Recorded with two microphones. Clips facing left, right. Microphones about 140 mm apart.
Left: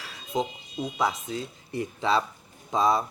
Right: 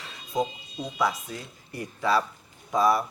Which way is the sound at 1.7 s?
20° left (ahead or behind).